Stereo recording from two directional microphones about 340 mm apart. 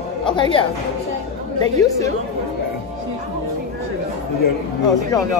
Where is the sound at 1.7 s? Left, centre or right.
Centre.